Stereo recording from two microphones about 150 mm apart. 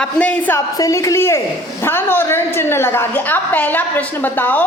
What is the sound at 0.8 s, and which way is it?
A woman's voice, 20° left (ahead or behind).